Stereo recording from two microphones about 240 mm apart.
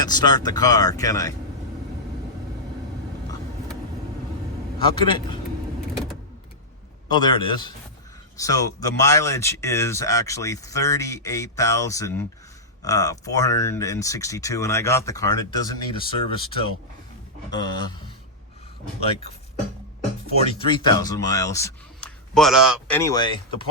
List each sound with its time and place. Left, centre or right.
0.0 s speech: centre
4.9 s a man's voice: centre
7.1 s a man's voice: centre
20.4 s speech: centre
22.4 s speech: centre
23.0 s speech: centre